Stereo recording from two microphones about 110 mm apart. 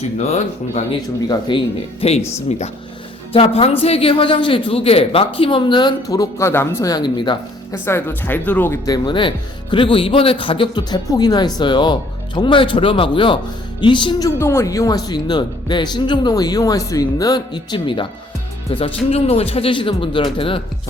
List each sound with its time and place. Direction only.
0.2 s speech: 85° left
1.3 s speech: 45° left (ahead or behind)
3.3 s speech: 60° left (ahead or behind); by 6.8 s 25° left (ahead or behind)
6.8 s speech: 40° left (ahead or behind)
7.7 s speech: 20° left (ahead or behind)
8.9 s speech: 45° left (ahead or behind)
14.3 s a man's voice: 25° left (ahead or behind); by 20.6 s 55° left (ahead or behind)